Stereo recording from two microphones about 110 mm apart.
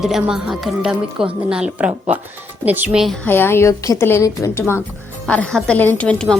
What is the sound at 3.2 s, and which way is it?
A woman's voice, 20° left (ahead or behind).